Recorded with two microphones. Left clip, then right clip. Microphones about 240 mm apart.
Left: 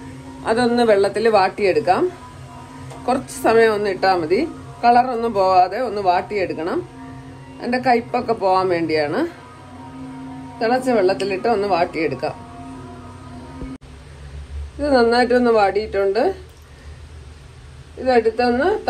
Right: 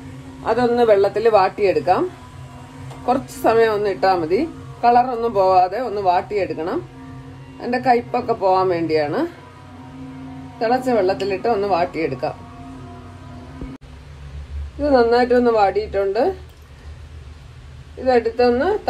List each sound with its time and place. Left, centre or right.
0.5 s speech: left
3.1 s a woman's voice: left
10.6 s a woman's voice: left
15.0 s a woman's voice: left
18.1 s a woman's voice: left